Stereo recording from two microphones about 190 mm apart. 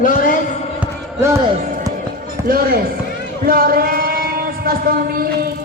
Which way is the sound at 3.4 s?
50° right (ahead or behind).